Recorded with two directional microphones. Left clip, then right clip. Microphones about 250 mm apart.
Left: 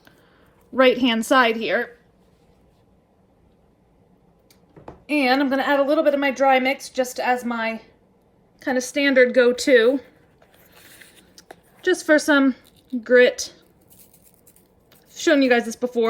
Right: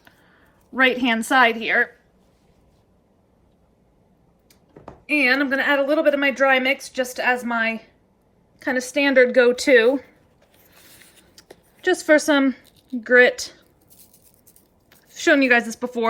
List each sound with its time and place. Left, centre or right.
0.8 s a woman's voice: left
5.0 s speech: centre
10.6 s mechanisms: centre
11.8 s speech: centre
14.8 s a woman's voice: centre